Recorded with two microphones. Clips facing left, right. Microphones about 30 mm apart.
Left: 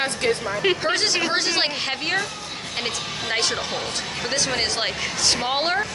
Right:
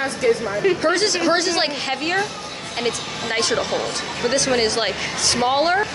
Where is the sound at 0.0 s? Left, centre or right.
Left.